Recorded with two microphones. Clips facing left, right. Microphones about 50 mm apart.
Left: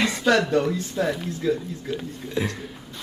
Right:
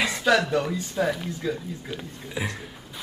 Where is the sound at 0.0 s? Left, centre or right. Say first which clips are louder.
Left 1 dB; centre.